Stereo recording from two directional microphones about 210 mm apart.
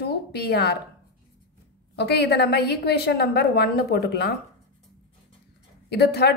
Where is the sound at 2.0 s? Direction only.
50° left (ahead or behind).